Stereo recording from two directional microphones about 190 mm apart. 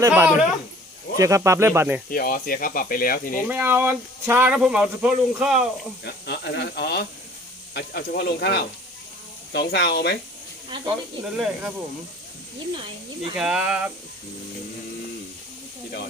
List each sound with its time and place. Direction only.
0.0 s speech: 10° right (ahead or behind)
2.0 s speech: 50° left (ahead or behind)
3.5 s speech: 10° right (ahead or behind)
6.1 s speech: 60° left (ahead or behind)
11.2 s speech: 5° right (ahead or behind)
13.3 s speech: 5° right (ahead or behind)